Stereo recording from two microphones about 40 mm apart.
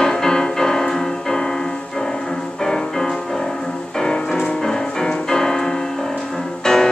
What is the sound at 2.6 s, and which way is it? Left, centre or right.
Music, centre.